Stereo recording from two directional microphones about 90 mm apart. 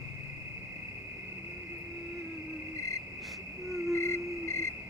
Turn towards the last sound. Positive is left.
turn(degrees=35)  # may be behind; listen again after turning